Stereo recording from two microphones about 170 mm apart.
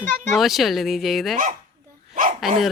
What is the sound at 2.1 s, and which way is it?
Dog, 50° right (ahead or behind).